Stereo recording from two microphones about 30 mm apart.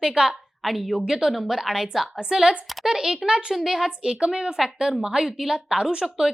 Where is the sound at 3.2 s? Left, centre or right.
Right.